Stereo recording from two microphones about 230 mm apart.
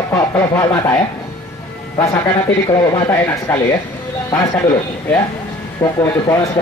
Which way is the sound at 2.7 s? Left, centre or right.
Centre.